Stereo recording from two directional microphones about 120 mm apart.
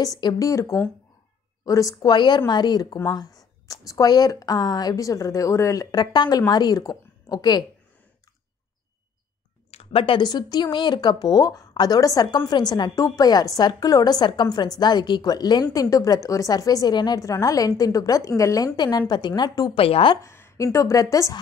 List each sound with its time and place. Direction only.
0.0 s a woman's voice: 30° left (ahead or behind)
9.7 s a woman's voice: 55° left (ahead or behind); by 19.7 s 35° left (ahead or behind)
19.7 s speech: 50° left (ahead or behind)
20.2 s a woman's voice: 20° left (ahead or behind)